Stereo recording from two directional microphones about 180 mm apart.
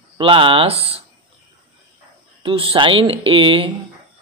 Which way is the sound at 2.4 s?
30° right (ahead or behind).